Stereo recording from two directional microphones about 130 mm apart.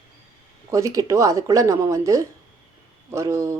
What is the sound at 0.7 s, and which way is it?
A woman's voice, 25° right (ahead or behind).